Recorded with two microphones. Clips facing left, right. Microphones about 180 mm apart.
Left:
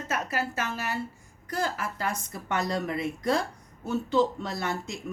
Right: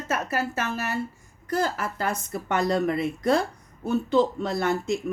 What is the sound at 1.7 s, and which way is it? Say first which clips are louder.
Speech: right 3 dB; 55° right (ahead or behind).